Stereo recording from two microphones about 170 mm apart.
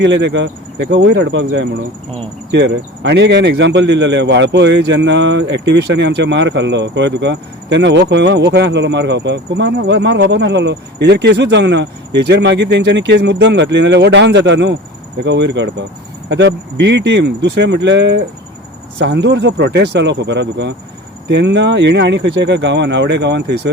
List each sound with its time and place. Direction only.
0.0 s speech: 90° right